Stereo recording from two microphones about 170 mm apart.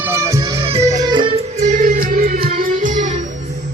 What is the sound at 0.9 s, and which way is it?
Music, 25° right (ahead or behind).